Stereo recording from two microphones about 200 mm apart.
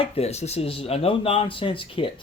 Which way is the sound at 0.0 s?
30° left (ahead or behind).